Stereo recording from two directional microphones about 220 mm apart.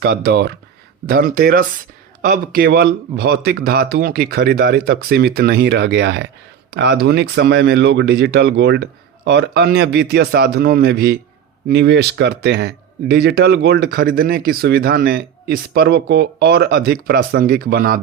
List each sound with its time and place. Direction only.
0.0 s speech: 45° right (ahead or behind)